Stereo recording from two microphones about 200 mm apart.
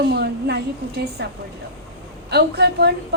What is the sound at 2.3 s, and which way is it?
Speech, 55° right (ahead or behind).